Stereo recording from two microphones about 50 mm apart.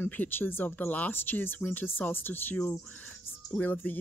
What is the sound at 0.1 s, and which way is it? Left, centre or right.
Speech, left.